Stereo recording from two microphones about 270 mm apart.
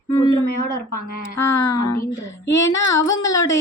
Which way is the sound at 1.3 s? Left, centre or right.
Centre.